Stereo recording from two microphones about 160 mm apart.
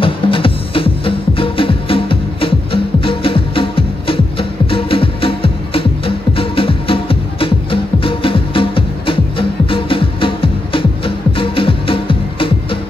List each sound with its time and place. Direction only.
0.0 s music: 35° left (ahead or behind)